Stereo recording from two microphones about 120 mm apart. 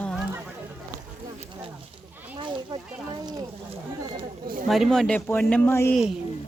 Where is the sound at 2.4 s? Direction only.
40° right (ahead or behind).